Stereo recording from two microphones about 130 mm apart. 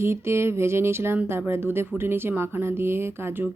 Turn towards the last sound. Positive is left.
turn(degrees=-15)  # may be behind; listen again after turning